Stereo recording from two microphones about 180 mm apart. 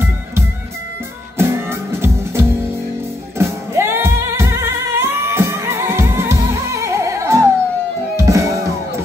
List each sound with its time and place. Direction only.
1.4 s music: 15° right (ahead or behind)